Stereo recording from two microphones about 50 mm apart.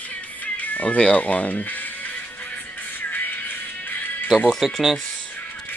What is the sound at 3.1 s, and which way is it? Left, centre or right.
Music, left.